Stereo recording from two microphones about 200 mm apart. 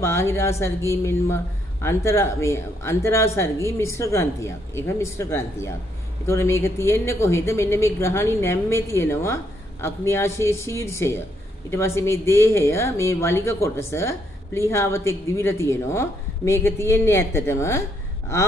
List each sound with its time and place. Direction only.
0.0 s speech: 15° left (ahead or behind)